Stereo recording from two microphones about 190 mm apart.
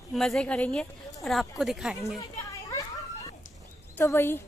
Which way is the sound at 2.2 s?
20° left (ahead or behind).